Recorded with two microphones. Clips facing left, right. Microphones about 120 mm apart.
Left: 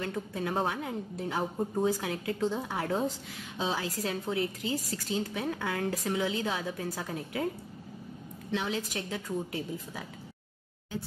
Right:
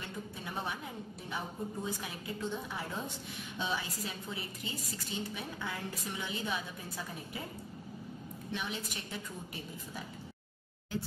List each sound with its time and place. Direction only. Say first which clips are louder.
0.0 s a woman's voice: left 9 dB; 90° left
8.5 s a woman's voice: left 7 dB; 90° left